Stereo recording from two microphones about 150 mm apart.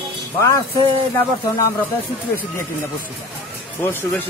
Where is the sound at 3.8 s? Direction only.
15° left (ahead or behind).